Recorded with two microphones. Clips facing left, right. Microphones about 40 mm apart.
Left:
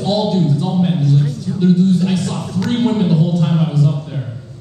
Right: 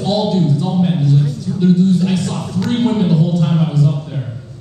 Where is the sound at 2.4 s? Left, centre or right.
Centre.